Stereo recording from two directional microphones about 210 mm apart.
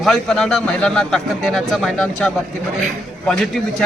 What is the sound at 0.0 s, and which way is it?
A man's voice, centre (ahead or behind).